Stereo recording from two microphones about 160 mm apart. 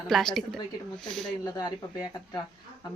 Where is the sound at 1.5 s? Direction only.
25° left (ahead or behind).